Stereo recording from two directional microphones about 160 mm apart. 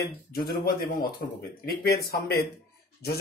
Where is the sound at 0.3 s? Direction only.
70° left (ahead or behind).